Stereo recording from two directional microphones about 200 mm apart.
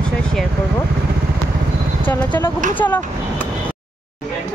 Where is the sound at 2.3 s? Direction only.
20° left (ahead or behind).